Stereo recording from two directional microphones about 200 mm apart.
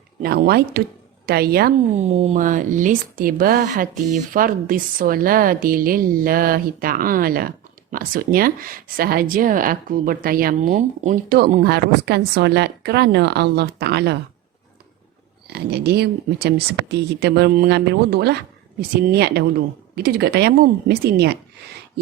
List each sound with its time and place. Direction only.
0.2 s speech: 50° right (ahead or behind)
1.9 s speech: 35° right (ahead or behind)
11.6 s speech: 55° right (ahead or behind)
15.4 s speech: 55° right (ahead or behind)